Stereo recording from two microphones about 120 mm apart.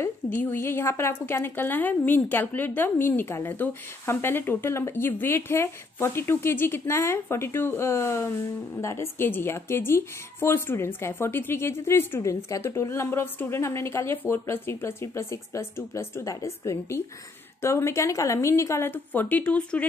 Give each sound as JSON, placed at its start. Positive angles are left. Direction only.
{"t": 0.0, "sound": "a woman's voice", "side_deg": 15}